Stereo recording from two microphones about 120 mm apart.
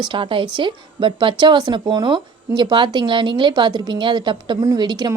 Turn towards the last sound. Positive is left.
turn(degrees=-35)  # may be behind; listen again after turning